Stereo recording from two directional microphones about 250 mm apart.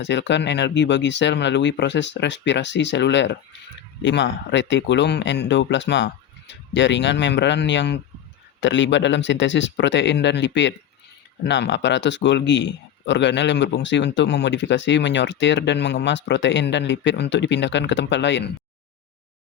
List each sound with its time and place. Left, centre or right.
0.0 s speech: left